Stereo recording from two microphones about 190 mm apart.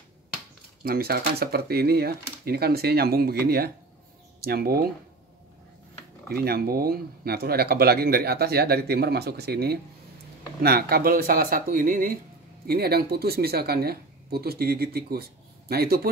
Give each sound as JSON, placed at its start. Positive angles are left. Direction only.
{"t": 0.8, "sound": "speech", "side_deg": -50}
{"t": 6.2, "sound": "speech", "side_deg": -55}